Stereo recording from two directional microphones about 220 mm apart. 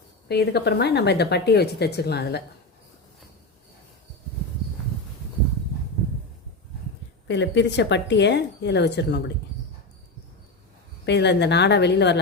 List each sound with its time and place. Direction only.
0.3 s speech: 50° left (ahead or behind)
7.3 s speech: 55° left (ahead or behind)
11.0 s speech: 50° left (ahead or behind)